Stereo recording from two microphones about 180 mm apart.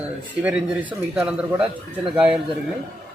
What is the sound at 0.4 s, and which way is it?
A man's voice, 5° right (ahead or behind).